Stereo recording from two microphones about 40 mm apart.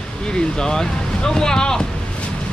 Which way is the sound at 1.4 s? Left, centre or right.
Centre.